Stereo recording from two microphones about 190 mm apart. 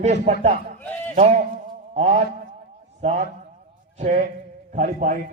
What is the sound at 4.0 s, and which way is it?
A man's voice, 40° right (ahead or behind).